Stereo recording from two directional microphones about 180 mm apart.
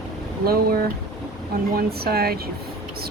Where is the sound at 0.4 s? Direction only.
55° right (ahead or behind).